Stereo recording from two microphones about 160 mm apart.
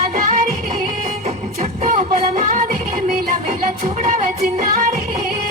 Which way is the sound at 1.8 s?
50° right (ahead or behind).